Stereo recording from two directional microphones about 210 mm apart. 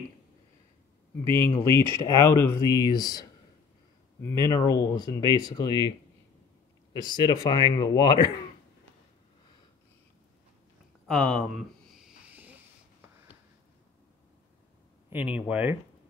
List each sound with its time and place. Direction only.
1.3 s speech: 15° left (ahead or behind)
6.9 s speech: 20° left (ahead or behind)
11.1 s speech: 5° left (ahead or behind)
11.9 s a sound: 5° right (ahead or behind)
15.0 s speech: 5° right (ahead or behind)